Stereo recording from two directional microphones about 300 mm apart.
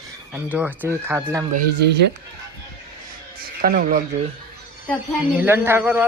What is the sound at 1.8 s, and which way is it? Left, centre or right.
Speech, right.